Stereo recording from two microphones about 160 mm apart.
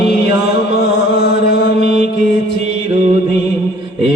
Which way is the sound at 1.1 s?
90° left.